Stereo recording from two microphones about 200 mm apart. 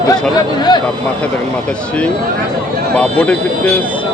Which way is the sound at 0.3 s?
20° left (ahead or behind).